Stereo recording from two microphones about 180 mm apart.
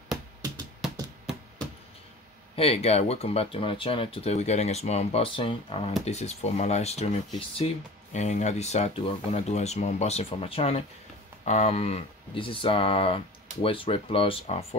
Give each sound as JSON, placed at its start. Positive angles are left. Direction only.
{"t": 2.5, "sound": "speech", "side_deg": 35}